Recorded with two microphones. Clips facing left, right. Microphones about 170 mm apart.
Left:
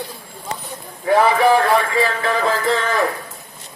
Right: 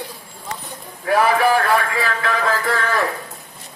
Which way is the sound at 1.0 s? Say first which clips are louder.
Left 2 dB; 25° left (ahead or behind).